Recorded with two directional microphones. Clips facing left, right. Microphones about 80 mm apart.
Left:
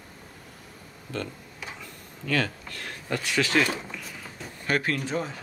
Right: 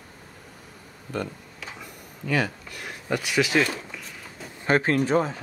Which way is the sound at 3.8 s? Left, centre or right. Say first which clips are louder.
Left 1 dB; centre.